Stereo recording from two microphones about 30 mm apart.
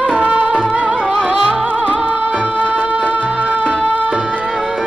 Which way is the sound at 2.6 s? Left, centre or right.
Right.